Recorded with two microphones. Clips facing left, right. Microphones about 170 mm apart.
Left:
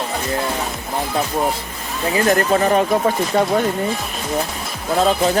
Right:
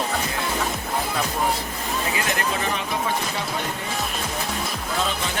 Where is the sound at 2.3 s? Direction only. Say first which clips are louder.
Left 10 dB; 45° left (ahead or behind).